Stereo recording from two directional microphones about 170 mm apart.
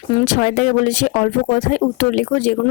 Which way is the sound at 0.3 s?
50° left (ahead or behind).